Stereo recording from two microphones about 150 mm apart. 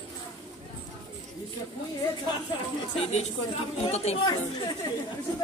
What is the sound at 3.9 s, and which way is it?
Speech, 45° left (ahead or behind).